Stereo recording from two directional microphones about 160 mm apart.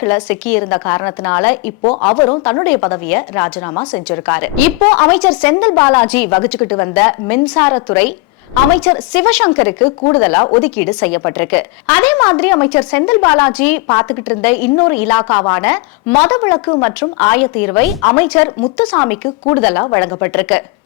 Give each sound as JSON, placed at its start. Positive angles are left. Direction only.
{"t": 0.0, "sound": "a woman's voice", "side_deg": 10}
{"t": 8.8, "sound": "a woman's voice", "side_deg": 10}